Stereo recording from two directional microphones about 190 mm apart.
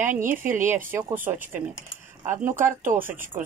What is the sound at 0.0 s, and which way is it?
Speech, 45° right (ahead or behind).